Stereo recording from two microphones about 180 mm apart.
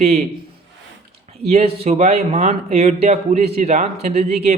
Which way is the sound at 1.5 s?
35° right (ahead or behind).